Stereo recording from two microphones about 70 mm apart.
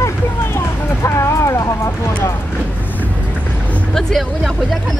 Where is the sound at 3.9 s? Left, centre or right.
Centre.